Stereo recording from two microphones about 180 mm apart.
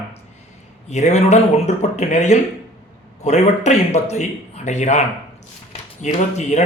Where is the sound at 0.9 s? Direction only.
40° left (ahead or behind).